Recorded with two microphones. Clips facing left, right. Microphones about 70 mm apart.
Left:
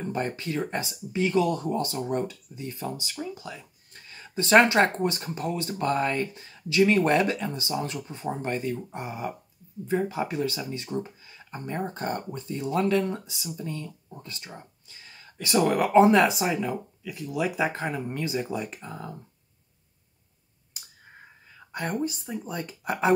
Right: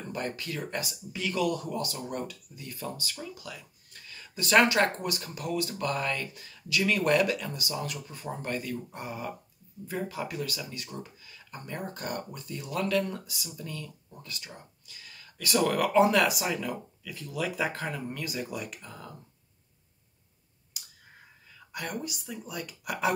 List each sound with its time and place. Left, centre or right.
0.1 s speech: left
21.5 s speech: left